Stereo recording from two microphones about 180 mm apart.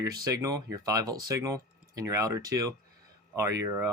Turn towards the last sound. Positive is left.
turn(degrees=-15)  # may be behind; listen again after turning